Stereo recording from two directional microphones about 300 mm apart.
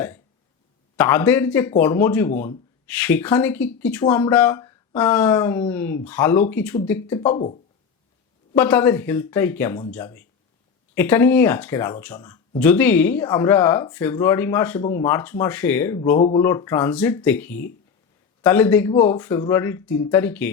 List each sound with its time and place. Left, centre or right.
0.9 s speech: centre
7.3 s speech: centre
8.5 s speech: centre